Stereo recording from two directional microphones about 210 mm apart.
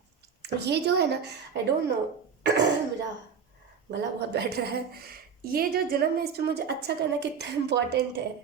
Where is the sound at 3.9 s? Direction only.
50° right (ahead or behind).